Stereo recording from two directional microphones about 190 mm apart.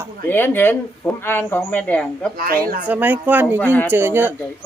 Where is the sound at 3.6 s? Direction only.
10° left (ahead or behind).